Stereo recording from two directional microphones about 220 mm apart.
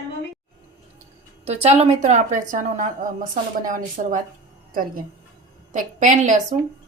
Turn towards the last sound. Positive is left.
turn(degrees=-35)  # may be behind; listen again after turning